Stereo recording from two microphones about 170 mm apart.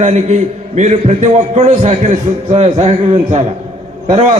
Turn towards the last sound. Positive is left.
turn(degrees=-40)  # may be behind; listen again after turning